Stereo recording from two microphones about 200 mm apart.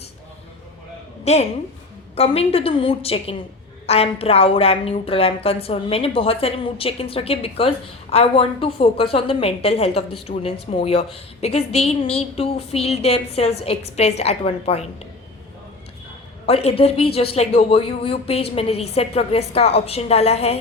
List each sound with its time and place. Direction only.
1.2 s a woman's voice: 35° left (ahead or behind)
16.5 s a woman's voice: 30° left (ahead or behind)